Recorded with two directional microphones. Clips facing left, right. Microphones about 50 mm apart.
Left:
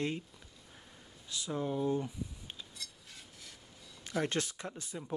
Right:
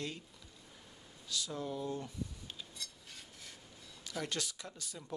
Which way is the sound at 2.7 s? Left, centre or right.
Centre.